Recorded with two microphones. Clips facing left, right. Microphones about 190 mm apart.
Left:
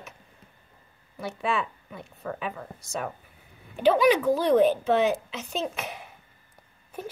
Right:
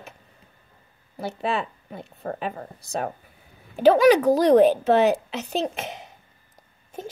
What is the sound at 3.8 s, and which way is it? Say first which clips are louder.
Speech: right 5 dB; 40° right (ahead or behind).